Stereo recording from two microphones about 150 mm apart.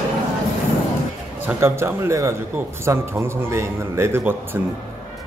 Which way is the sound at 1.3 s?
15° right (ahead or behind).